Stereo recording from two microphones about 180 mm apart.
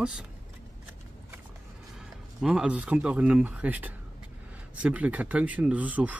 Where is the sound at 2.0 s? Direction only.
5° right (ahead or behind).